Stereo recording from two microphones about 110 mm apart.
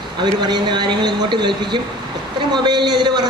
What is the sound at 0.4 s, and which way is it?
A man's voice, 40° right (ahead or behind).